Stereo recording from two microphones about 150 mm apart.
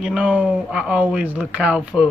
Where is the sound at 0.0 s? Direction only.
5° right (ahead or behind).